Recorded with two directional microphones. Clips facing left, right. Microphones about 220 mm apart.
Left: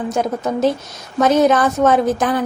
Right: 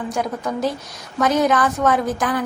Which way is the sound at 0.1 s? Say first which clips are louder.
Left 5 dB; 25° left (ahead or behind).